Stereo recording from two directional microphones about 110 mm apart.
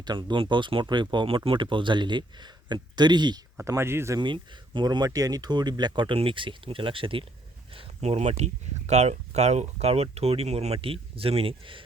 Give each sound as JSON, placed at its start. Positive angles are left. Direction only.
{"t": 0.0, "sound": "speech", "side_deg": -45}
{"t": 3.6, "sound": "speech", "side_deg": -25}
{"t": 4.2, "sound": "speech", "side_deg": -45}
{"t": 8.9, "sound": "speech", "side_deg": -85}